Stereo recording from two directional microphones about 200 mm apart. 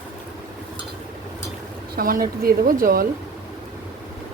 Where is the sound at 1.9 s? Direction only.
45° right (ahead or behind).